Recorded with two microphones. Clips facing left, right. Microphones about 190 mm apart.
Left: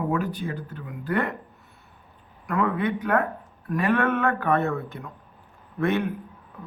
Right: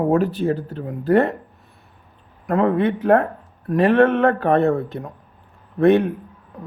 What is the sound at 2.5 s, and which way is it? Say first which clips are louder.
Speech: right 7 dB; 30° right (ahead or behind).